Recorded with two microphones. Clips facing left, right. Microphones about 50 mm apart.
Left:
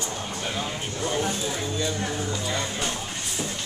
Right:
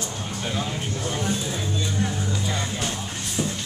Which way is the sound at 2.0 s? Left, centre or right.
Centre.